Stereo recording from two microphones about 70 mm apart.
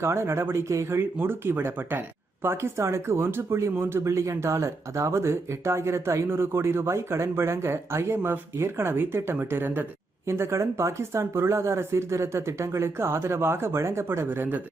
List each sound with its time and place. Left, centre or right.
0.0 s speech: right